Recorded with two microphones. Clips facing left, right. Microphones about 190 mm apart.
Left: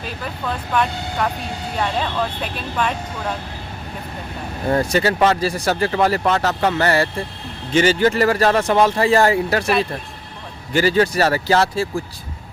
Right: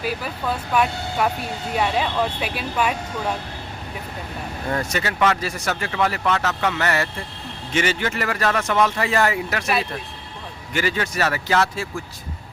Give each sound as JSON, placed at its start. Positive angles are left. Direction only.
{"t": 0.0, "sound": "speech", "side_deg": -10}
{"t": 4.7, "sound": "speech", "side_deg": 35}
{"t": 10.7, "sound": "speech", "side_deg": 35}